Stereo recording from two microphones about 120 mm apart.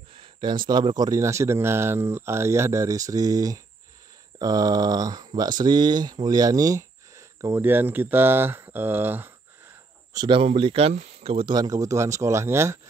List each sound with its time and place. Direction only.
0.1 s speech: 45° right (ahead or behind); by 9.3 s 15° right (ahead or behind)
10.1 s speech: 40° right (ahead or behind)
10.4 s speech: 50° right (ahead or behind)
11.5 s speech: 30° right (ahead or behind)